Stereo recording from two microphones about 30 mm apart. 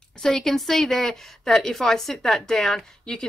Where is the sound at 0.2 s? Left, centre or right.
Centre.